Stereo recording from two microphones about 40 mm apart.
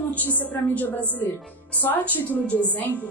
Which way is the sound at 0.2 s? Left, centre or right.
Left.